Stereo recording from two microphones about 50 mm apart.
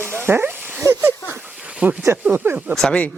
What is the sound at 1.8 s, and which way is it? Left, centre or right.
Stir, right.